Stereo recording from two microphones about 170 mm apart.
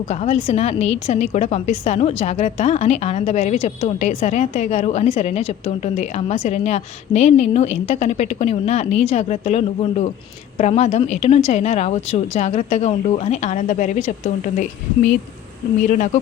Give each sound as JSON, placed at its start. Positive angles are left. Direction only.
{"t": 0.1, "sound": "a woman's voice", "side_deg": 40}